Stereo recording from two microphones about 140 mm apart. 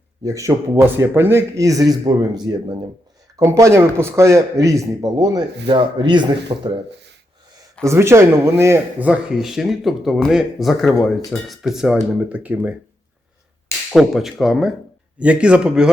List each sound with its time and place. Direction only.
0.3 s a man's voice: 20° right (ahead or behind)
7.9 s speech: 20° right (ahead or behind)
13.9 s speech: centre (ahead or behind)